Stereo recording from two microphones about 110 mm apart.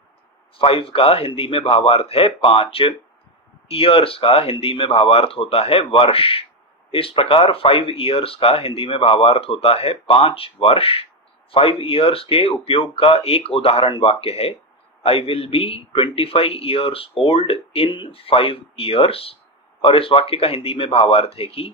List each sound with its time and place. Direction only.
0.6 s a man's voice: 55° left (ahead or behind)